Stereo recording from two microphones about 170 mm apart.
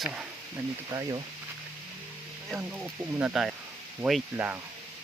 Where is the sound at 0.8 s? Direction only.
20° right (ahead or behind).